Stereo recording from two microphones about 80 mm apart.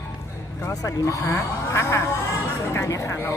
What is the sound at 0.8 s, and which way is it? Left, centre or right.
Speech, left.